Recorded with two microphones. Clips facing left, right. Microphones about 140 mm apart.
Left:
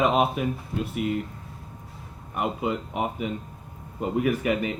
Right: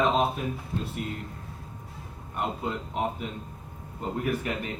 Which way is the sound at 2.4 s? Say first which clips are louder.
Left 4 dB; 80° left.